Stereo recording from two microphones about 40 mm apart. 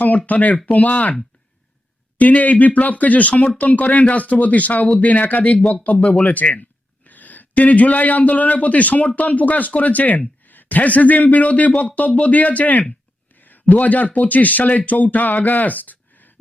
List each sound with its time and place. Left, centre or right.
0.0 s speech: left
2.1 s speech: left
6.0 s speech: centre
6.2 s speech: left